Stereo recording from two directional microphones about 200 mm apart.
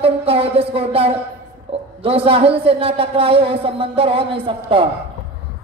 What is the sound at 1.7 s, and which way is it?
A man's voice, 30° right (ahead or behind).